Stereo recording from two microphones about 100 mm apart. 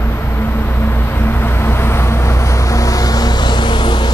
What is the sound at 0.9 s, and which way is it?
Vehicle, 20° left (ahead or behind).